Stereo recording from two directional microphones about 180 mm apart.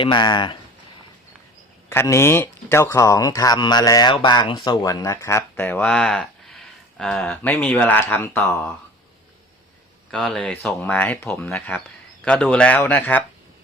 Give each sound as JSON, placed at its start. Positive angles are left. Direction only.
{"t": 0.0, "sound": "speech", "side_deg": 25}
{"t": 1.9, "sound": "speech", "side_deg": 15}
{"t": 10.1, "sound": "speech", "side_deg": 5}